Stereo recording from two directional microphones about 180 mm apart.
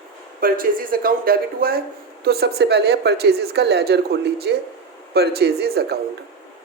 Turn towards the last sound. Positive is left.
turn(degrees=-60)  # may be behind; listen again after turning